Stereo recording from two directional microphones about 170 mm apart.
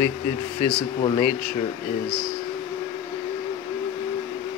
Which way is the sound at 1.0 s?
30° left (ahead or behind).